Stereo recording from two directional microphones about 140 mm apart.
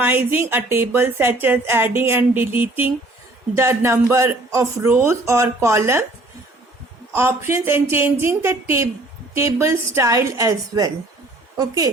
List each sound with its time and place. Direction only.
0.0 s speech: 15° right (ahead or behind)
7.1 s speech: 15° right (ahead or behind)